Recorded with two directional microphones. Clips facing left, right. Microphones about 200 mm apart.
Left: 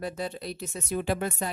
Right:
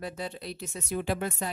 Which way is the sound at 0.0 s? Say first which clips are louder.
Left 3 dB; 45° left (ahead or behind).